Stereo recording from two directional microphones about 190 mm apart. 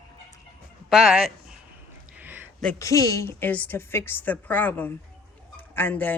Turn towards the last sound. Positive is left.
turn(degrees=10)  # may be behind; listen again after turning